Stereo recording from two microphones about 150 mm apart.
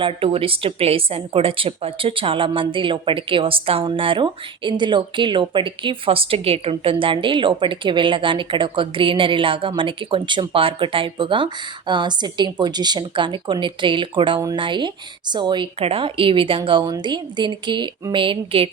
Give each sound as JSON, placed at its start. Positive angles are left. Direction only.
{"t": 0.0, "sound": "a woman's voice", "side_deg": -35}